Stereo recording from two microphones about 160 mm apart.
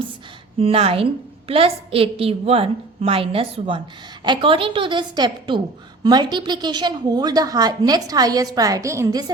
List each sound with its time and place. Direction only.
0.6 s a woman's voice: 35° right (ahead or behind)